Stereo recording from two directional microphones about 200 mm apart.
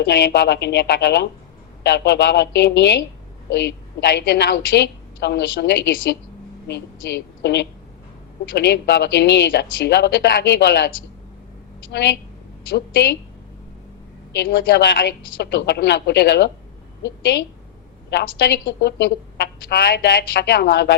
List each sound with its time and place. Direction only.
0.0 s a woman's voice: 55° left (ahead or behind)
14.3 s a woman's voice: 50° left (ahead or behind)